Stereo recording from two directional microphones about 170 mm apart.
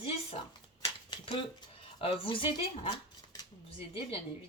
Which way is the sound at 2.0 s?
30° left (ahead or behind).